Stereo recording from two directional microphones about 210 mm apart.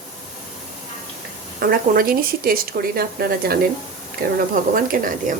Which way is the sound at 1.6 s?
45° right (ahead or behind).